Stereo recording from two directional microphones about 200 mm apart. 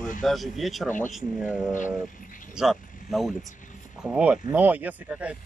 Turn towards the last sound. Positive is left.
turn(degrees=-5)  # may be behind; listen again after turning